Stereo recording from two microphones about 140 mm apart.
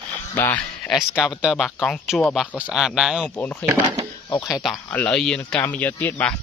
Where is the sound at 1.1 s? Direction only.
5° right (ahead or behind).